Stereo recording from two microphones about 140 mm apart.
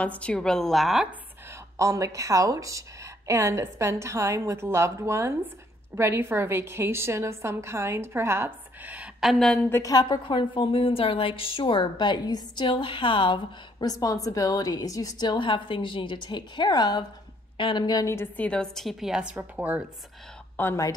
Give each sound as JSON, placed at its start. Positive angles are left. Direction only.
{"t": 0.0, "sound": "a woman's voice", "side_deg": 10}
{"t": 1.8, "sound": "a woman's voice", "side_deg": -25}
{"t": 9.7, "sound": "a woman's voice", "side_deg": 25}
{"t": 20.5, "sound": "speech", "side_deg": 20}